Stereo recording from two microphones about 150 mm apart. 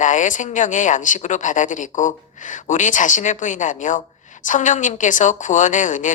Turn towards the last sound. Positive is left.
turn(degrees=60)  # may be behind; listen again after turning